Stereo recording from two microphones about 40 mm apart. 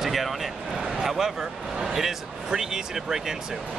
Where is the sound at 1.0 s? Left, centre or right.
Centre.